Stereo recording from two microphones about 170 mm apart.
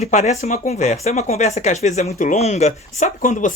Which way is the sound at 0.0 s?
40° left (ahead or behind).